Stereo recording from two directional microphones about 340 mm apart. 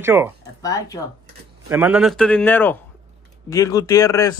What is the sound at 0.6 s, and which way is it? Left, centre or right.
Speech, centre.